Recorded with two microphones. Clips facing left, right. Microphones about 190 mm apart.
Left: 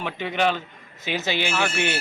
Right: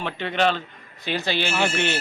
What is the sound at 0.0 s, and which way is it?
Speech, 10° left (ahead or behind).